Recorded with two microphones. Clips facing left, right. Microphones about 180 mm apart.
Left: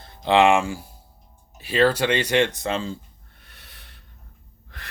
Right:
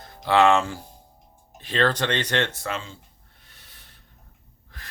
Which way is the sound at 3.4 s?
65° left (ahead or behind).